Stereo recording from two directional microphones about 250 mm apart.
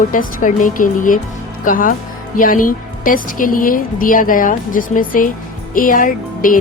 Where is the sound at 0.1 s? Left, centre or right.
Left.